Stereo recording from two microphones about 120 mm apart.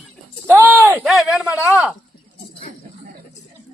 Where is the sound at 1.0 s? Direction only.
Centre (ahead or behind).